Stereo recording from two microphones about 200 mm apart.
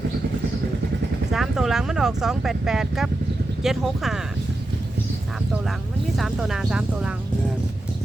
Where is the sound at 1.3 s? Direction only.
Centre (ahead or behind).